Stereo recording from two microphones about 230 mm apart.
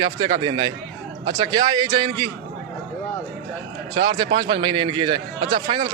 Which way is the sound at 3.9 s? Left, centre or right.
Centre.